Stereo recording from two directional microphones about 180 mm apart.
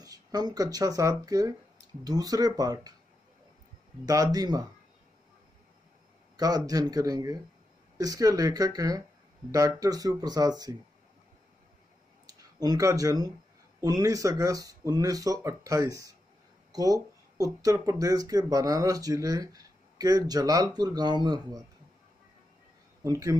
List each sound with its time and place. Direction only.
0.0 s speech: 20° right (ahead or behind)
4.0 s speech: 20° right (ahead or behind)
6.3 s speech: 20° right (ahead or behind)
12.3 s speech: 20° right (ahead or behind)
23.0 s speech: 20° right (ahead or behind)